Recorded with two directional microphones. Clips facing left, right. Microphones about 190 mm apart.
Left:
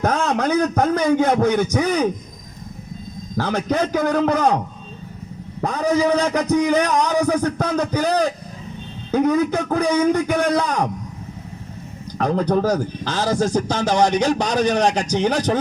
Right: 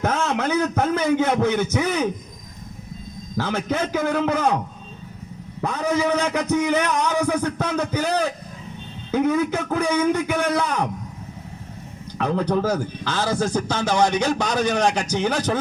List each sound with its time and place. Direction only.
0.0 s a man's voice: 35° left (ahead or behind)
3.3 s a man's voice: 40° left (ahead or behind)
5.6 s a man's voice: 35° left (ahead or behind)
12.1 s a man's voice: 40° left (ahead or behind)